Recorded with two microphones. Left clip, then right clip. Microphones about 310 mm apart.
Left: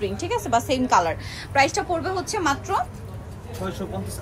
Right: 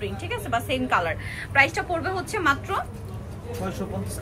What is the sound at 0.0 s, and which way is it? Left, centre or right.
A woman's voice, centre.